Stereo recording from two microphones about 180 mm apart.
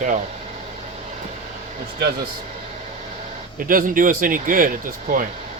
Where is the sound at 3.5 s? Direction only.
50° right (ahead or behind).